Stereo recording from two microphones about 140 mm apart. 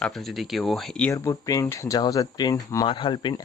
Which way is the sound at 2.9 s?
35° left (ahead or behind).